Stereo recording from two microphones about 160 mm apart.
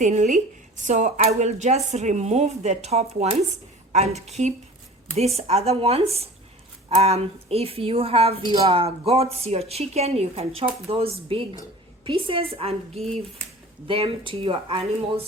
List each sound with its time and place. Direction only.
0.0 s a woman's voice: 50° right (ahead or behind)
1.4 s a woman's voice: 45° right (ahead or behind)